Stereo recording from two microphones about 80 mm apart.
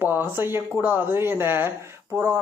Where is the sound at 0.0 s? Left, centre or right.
Right.